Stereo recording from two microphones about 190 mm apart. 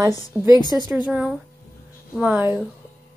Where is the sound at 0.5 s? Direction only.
20° left (ahead or behind).